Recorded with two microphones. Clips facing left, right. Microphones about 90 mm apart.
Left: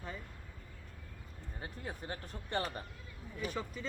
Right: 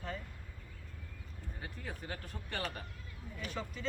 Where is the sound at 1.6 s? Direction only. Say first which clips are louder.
Left 2 dB; 25° left (ahead or behind).